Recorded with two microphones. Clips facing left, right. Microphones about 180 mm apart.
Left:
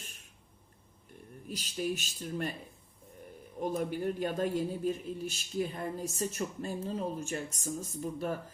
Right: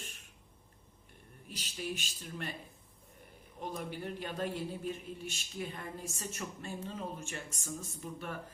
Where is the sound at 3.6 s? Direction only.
45° left (ahead or behind).